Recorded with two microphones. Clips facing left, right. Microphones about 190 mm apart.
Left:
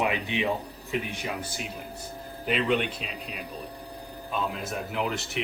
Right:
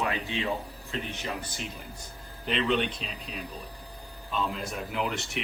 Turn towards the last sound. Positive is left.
turn(degrees=0)  # may be behind; listen again after turning